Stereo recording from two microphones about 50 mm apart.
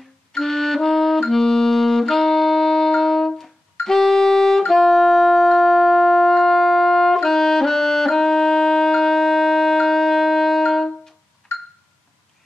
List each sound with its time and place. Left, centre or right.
0.4 s music: centre